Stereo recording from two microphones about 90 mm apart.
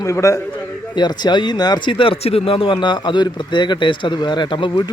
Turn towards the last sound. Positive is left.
turn(degrees=60)  # may be behind; listen again after turning